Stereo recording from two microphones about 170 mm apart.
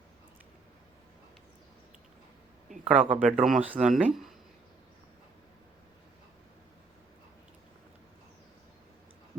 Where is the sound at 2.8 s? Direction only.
40° right (ahead or behind).